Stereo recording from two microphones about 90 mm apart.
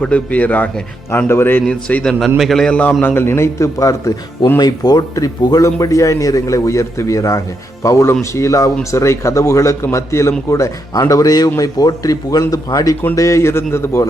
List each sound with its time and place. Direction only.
0.0 s a man's voice: 15° left (ahead or behind)
1.6 s a man's voice: 10° left (ahead or behind)
3.0 s a man's voice: 25° left (ahead or behind)
4.6 s a man's voice: 50° left (ahead or behind); by 14.1 s 30° left (ahead or behind)